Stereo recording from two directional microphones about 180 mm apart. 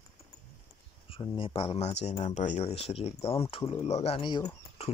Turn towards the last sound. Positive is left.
turn(degrees=25)  # may be behind; listen again after turning